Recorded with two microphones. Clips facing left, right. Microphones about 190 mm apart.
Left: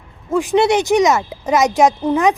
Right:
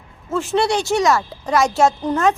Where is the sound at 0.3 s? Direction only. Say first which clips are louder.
Left 4 dB; 15° left (ahead or behind).